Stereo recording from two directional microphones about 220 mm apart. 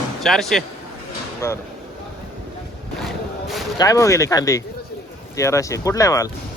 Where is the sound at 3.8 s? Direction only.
15° left (ahead or behind).